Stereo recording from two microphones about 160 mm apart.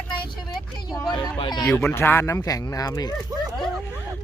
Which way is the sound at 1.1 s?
30° left (ahead or behind).